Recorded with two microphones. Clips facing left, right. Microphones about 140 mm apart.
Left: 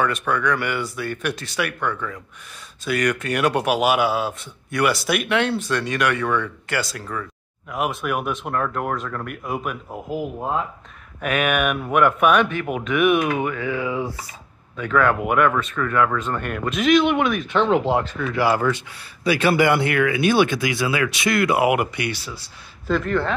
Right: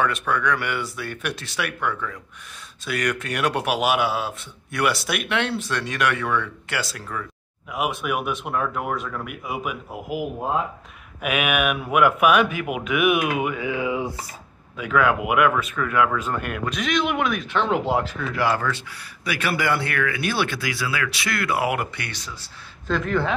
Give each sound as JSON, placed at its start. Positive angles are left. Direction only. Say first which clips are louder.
{"t": 0.0, "sound": "speech", "louder": "left 1 dB", "side_deg": 0}
{"t": 14.8, "sound": "speech", "louder": "left 1 dB", "side_deg": -5}
{"t": 19.2, "sound": "speech", "louder": "left 7 dB", "side_deg": 25}